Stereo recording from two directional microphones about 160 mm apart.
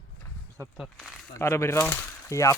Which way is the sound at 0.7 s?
Centre (ahead or behind).